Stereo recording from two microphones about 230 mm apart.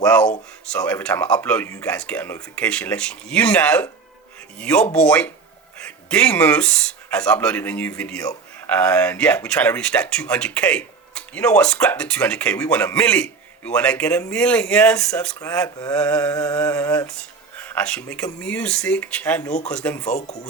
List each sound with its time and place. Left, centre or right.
0.0 s speech: centre
20.1 s speech: left